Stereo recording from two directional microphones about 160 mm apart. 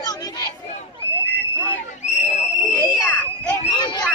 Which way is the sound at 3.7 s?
30° left (ahead or behind).